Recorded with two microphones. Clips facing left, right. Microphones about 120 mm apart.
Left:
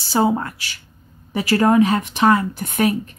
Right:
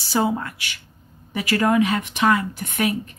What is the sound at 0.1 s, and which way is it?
Speech, 30° left (ahead or behind).